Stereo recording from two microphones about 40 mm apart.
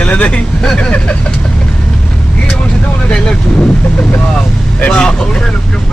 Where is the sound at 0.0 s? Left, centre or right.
Left.